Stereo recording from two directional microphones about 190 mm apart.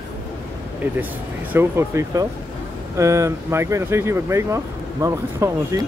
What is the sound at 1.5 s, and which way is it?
Speech, 10° right (ahead or behind).